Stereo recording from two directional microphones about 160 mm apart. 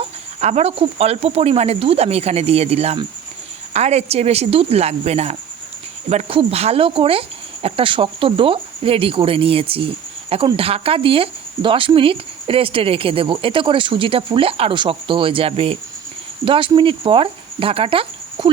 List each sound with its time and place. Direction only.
0.3 s speech: 45° right (ahead or behind)